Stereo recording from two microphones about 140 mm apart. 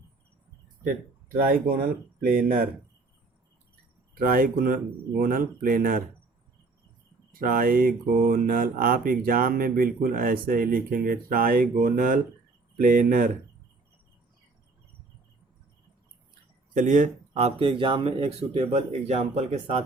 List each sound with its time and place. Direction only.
0.9 s speech: 75° right (ahead or behind)
2.2 s mantra: 90° right
4.1 s mantra: 90° right
5.2 s speech: 85° right
7.3 s mantra: 90° right
12.7 s speech: 75° right (ahead or behind)
16.7 s speech: 65° right (ahead or behind)